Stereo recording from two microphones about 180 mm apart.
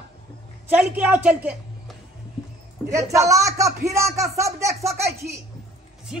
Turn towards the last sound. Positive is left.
turn(degrees=-15)  # may be behind; listen again after turning